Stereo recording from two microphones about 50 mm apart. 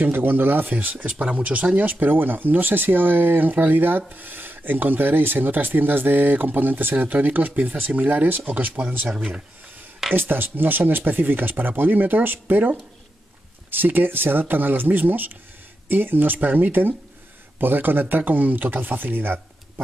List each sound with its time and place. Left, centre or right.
0.0 s speech: right
10.1 s speech: right